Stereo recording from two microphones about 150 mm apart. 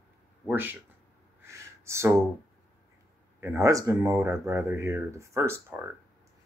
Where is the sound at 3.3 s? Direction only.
20° right (ahead or behind).